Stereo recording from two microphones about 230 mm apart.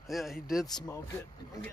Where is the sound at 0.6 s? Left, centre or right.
Centre.